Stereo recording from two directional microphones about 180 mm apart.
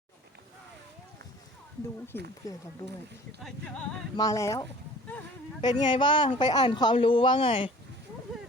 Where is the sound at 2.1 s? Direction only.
10° left (ahead or behind).